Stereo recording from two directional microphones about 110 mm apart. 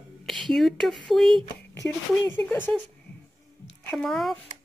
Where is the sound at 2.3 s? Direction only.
20° left (ahead or behind).